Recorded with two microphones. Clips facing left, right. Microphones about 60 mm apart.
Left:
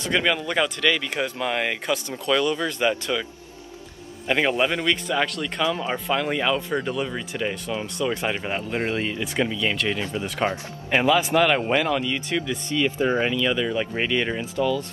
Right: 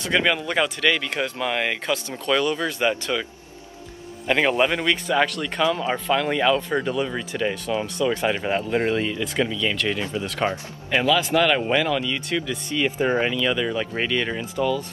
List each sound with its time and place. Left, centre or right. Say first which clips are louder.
0.0 s speech: right 1 dB; centre
2.8 s speech: even; centre
4.3 s speech: right 2 dB; centre
12.6 s speech: even; centre
13.3 s speech: even; centre
13.9 s speech: even; centre